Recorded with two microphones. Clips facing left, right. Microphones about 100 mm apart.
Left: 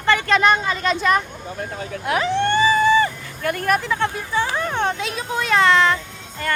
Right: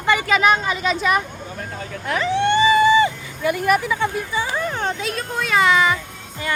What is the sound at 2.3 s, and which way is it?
Vehicle, 15° right (ahead or behind).